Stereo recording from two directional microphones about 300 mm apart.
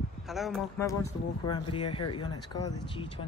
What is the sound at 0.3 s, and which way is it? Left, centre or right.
Speech, centre.